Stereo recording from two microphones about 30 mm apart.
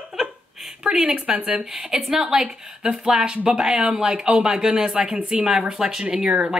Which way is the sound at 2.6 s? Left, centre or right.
Right.